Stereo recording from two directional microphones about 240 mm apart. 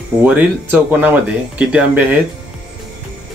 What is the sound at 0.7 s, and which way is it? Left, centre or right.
Speech, centre.